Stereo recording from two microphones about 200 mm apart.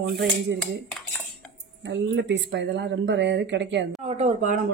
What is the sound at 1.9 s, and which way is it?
Speech, 60° right (ahead or behind).